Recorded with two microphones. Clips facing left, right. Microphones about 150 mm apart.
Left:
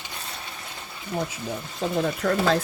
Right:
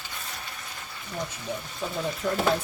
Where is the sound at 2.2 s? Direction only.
70° left (ahead or behind).